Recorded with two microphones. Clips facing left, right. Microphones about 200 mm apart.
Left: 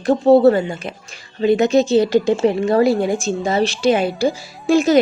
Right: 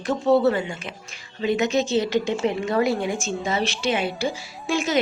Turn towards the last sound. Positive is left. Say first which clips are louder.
# left 10 dB
turn(degrees=35)  # may be behind; listen again after turning